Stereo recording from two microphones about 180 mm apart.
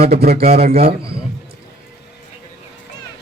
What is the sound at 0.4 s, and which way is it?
Speech, 35° right (ahead or behind).